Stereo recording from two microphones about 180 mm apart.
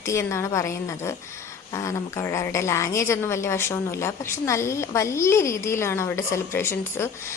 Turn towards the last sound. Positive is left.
turn(degrees=15)  # may be behind; listen again after turning